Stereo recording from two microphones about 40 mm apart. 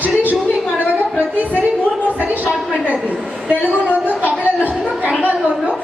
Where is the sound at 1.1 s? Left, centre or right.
Right.